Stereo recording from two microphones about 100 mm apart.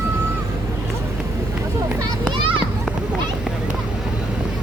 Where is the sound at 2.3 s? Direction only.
60° right (ahead or behind).